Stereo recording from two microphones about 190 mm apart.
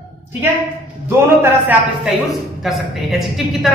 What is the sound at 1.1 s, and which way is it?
A man's voice, 10° right (ahead or behind).